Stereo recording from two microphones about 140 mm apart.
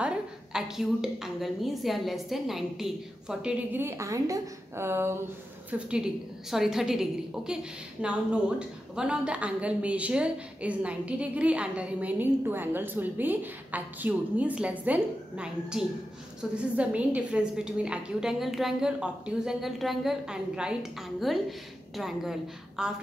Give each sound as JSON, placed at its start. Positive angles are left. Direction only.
{"t": 0.0, "sound": "a woman's voice", "side_deg": -5}
{"t": 3.8, "sound": "a woman's voice", "side_deg": -25}